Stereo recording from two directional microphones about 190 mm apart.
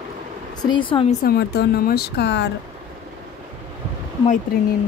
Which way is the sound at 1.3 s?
55° left (ahead or behind).